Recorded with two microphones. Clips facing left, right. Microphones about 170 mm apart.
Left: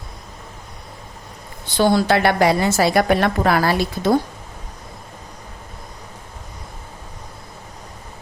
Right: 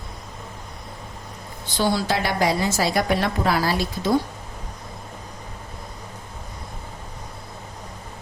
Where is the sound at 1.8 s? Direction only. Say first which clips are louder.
Left 7 dB; 55° left (ahead or behind).